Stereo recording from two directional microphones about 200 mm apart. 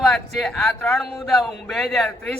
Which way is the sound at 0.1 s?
Centre (ahead or behind).